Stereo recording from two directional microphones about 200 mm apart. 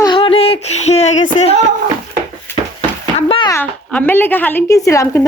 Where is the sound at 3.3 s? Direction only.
25° left (ahead or behind).